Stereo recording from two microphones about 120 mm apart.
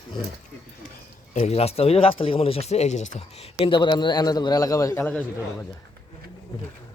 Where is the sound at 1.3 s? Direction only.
65° left (ahead or behind); by 5.0 s 30° left (ahead or behind).